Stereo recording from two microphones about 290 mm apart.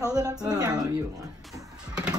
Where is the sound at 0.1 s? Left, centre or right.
Centre.